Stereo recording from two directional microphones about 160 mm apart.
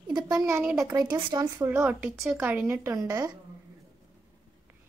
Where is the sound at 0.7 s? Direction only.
20° right (ahead or behind).